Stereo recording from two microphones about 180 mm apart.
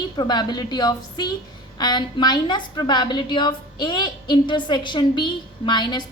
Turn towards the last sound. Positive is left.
turn(degrees=25)  # may be behind; listen again after turning